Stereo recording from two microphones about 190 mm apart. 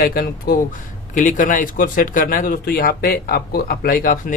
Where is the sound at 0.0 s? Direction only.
50° left (ahead or behind).